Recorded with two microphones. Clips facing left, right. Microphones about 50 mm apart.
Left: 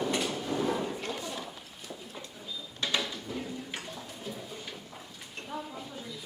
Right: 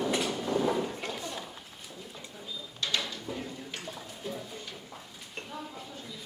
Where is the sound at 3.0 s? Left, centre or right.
Centre.